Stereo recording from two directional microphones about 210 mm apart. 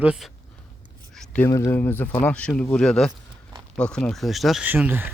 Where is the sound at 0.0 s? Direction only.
5° right (ahead or behind).